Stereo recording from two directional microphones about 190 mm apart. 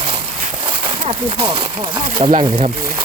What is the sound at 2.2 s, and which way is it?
Speech, 40° right (ahead or behind).